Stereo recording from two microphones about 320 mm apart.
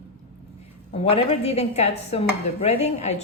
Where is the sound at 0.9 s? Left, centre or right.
Centre.